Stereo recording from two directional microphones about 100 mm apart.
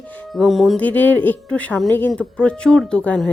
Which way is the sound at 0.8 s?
15° left (ahead or behind).